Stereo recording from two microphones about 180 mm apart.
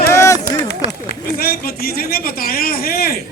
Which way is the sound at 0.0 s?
15° left (ahead or behind).